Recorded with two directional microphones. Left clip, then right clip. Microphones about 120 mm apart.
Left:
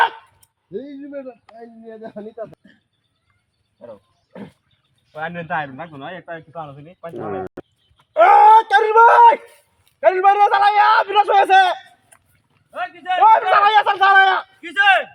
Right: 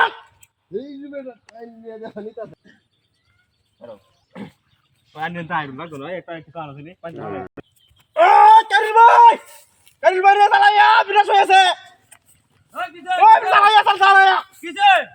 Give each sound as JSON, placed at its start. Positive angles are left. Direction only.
{"t": 0.7, "sound": "speech", "side_deg": -30}
{"t": 3.8, "sound": "wild animals", "side_deg": -30}
{"t": 4.3, "sound": "wild animals", "side_deg": -5}
{"t": 5.1, "sound": "a man's voice", "side_deg": -5}
{"t": 7.6, "sound": "a sound", "side_deg": 0}
{"t": 8.1, "sound": "wail", "side_deg": -5}
{"t": 10.0, "sound": "a man's voice", "side_deg": -5}
{"t": 12.7, "sound": "a man's voice", "side_deg": 0}
{"t": 13.2, "sound": "a man's voice", "side_deg": -10}
{"t": 14.6, "sound": "speech", "side_deg": 10}